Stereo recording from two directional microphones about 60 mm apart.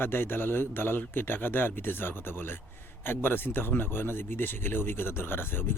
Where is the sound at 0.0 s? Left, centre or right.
Left.